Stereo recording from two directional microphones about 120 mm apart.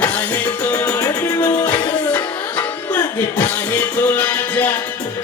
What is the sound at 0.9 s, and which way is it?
Music, 25° left (ahead or behind).